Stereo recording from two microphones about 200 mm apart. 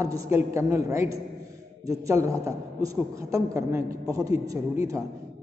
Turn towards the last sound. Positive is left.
turn(degrees=-15)  # may be behind; listen again after turning